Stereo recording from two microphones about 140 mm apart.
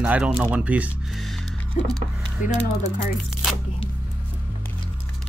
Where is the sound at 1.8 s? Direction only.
60° left (ahead or behind).